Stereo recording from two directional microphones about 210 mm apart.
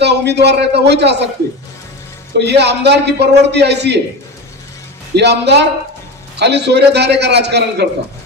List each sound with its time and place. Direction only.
0.0 s a man's voice: 55° right (ahead or behind)
2.4 s a man's voice: 55° right (ahead or behind)
5.1 s a man's voice: 55° right (ahead or behind)